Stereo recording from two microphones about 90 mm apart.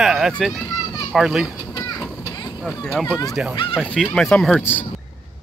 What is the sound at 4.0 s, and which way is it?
Speech, centre (ahead or behind).